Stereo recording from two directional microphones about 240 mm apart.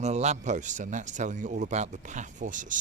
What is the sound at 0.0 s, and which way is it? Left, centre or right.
Speech, right.